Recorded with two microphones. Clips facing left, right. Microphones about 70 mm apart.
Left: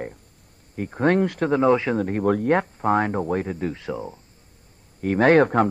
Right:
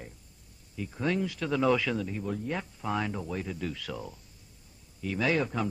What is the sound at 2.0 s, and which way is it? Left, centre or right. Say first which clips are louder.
A man's voice: left 12 dB; left.